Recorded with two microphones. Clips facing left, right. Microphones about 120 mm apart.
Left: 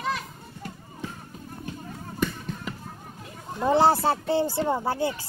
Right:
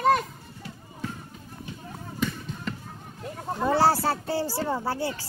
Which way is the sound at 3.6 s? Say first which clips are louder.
Left 2 dB; 20° left (ahead or behind).